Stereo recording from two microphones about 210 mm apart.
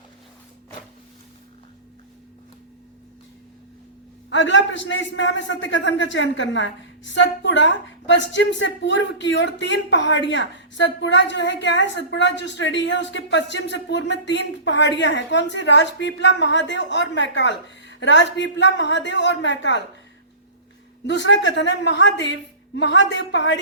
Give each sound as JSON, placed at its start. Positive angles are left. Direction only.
{"t": 4.3, "sound": "a man's voice", "side_deg": 60}
{"t": 21.1, "sound": "a man's voice", "side_deg": 60}